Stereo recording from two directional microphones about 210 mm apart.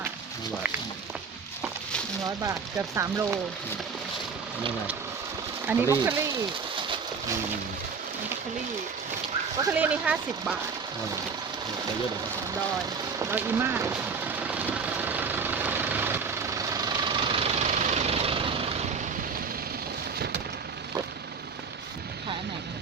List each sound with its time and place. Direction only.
2.2 s speech: 15° right (ahead or behind)
5.6 s speech: 10° right (ahead or behind)
9.7 s speech: 5° right (ahead or behind)
13.1 s vehicle: 10° right (ahead or behind); by 18.8 s 25° right (ahead or behind)